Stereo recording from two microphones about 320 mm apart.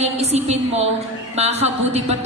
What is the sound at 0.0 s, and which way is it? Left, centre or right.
A woman's voice, centre.